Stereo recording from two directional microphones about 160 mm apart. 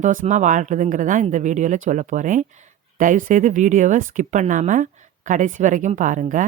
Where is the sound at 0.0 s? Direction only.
50° right (ahead or behind).